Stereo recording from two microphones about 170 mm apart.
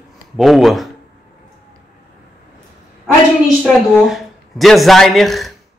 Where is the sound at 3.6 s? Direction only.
Centre (ahead or behind).